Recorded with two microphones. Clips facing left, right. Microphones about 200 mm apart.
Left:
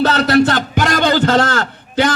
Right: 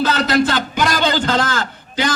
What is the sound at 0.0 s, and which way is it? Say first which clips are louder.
A man's voice: left 4 dB; 65° left (ahead or behind).